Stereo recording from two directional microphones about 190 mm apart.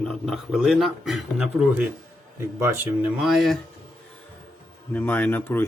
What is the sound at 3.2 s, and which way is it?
Speech, centre (ahead or behind).